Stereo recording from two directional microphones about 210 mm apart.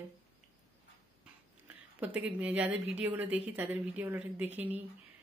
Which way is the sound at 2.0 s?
5° right (ahead or behind).